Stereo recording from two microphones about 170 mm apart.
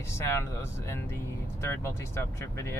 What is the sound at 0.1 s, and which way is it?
Speech, 15° left (ahead or behind).